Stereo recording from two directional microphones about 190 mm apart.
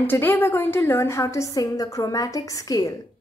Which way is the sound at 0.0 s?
10° left (ahead or behind).